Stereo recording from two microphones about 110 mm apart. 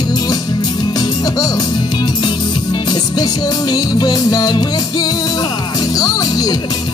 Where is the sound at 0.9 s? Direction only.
35° left (ahead or behind).